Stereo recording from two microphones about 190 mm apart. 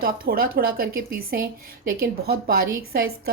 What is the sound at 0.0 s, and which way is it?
A woman's voice, 50° right (ahead or behind).